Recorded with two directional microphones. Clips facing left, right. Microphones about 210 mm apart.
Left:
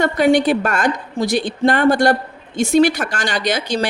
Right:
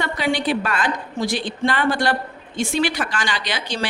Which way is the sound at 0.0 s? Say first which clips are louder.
Left 8 dB; 45° left (ahead or behind).